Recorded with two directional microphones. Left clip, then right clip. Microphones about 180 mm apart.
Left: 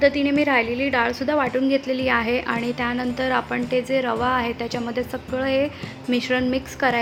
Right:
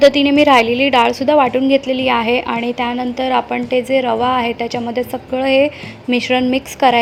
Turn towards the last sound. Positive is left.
turn(degrees=-20)  # may be behind; listen again after turning